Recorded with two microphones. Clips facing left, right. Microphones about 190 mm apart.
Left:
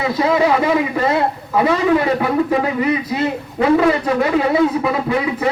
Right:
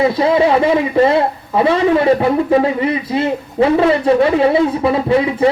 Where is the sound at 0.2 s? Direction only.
25° right (ahead or behind).